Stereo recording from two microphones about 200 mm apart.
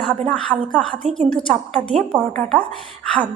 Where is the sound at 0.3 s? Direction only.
5° left (ahead or behind).